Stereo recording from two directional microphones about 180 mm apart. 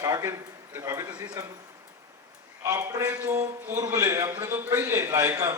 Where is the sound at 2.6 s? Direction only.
20° right (ahead or behind).